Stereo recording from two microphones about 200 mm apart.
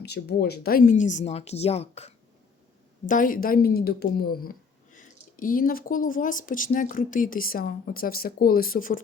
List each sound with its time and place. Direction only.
0.0 s speech: 55° left (ahead or behind); by 2.1 s 30° left (ahead or behind)
3.1 s speech: 45° left (ahead or behind)